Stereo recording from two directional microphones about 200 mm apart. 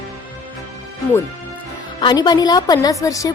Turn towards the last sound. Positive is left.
turn(degrees=15)  # may be behind; listen again after turning